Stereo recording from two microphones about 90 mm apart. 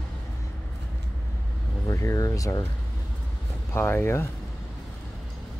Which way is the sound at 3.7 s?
25° left (ahead or behind).